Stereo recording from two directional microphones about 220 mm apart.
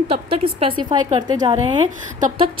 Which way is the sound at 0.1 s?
25° right (ahead or behind).